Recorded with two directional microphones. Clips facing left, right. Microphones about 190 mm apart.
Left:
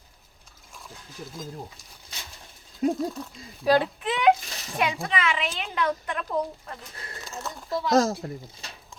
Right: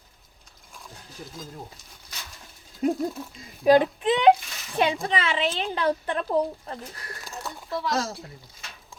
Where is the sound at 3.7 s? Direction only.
20° right (ahead or behind).